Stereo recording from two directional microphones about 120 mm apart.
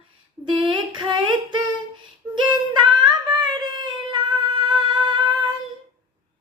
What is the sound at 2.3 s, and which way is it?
Child singing, 40° right (ahead or behind).